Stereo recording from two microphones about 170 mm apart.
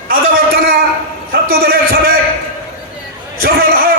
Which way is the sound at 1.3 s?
60° right (ahead or behind).